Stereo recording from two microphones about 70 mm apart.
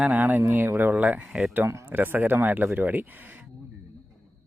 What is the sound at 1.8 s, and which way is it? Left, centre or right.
Speech, right.